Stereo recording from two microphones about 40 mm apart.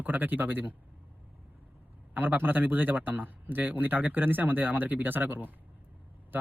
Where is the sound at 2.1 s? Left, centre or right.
Right.